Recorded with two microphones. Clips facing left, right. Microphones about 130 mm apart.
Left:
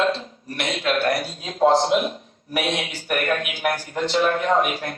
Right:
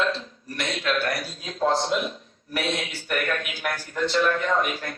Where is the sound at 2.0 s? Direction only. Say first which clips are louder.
Left 5 dB; 15° left (ahead or behind).